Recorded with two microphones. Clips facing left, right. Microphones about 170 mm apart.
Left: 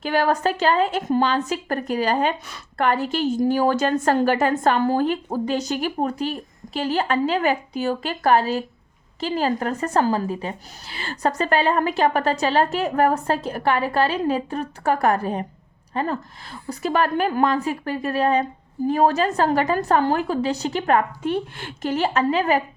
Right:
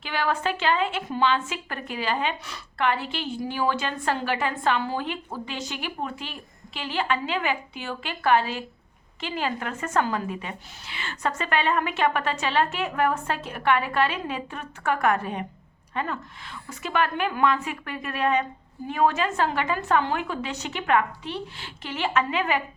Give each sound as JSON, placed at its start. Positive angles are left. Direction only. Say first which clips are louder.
{"t": 0.0, "sound": "a woman's voice", "louder": "left 6 dB", "side_deg": 45}